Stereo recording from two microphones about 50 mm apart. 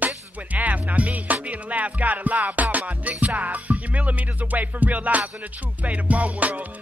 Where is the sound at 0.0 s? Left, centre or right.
Right.